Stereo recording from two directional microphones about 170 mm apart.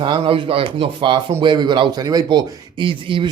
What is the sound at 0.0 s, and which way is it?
A man's voice, 30° right (ahead or behind).